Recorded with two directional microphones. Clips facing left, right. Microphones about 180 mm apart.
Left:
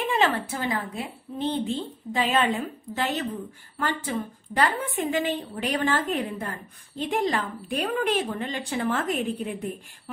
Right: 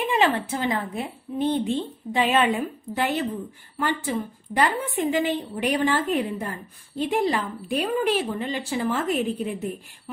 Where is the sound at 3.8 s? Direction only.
10° right (ahead or behind).